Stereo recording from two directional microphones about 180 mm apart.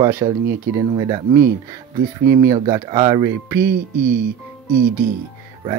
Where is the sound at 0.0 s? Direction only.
15° right (ahead or behind).